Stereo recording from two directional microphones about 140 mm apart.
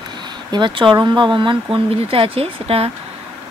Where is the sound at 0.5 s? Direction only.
35° right (ahead or behind).